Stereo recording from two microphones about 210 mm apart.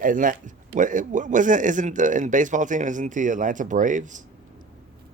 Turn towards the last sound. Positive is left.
turn(degrees=-35)  # may be behind; listen again after turning